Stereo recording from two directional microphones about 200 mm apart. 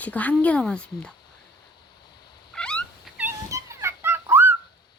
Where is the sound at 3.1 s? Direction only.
10° right (ahead or behind).